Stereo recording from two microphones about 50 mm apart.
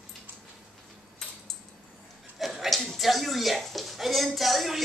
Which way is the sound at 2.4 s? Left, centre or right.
Centre.